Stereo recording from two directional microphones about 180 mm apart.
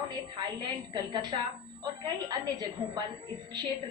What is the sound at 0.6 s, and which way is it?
A woman's voice, 25° right (ahead or behind).